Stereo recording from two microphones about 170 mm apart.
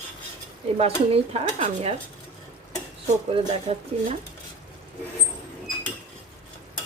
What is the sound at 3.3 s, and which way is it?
Speech, 35° right (ahead or behind).